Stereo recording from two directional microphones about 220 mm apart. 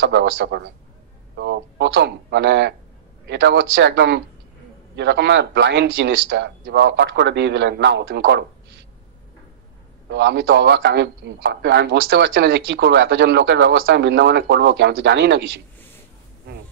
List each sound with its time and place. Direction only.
0.0 s a man's voice: 50° right (ahead or behind)
10.0 s a man's voice: 55° right (ahead or behind)